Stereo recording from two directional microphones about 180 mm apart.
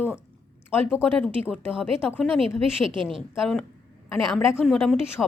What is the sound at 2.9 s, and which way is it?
Speech, 30° right (ahead or behind).